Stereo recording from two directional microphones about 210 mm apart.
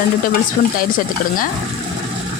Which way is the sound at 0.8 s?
40° left (ahead or behind).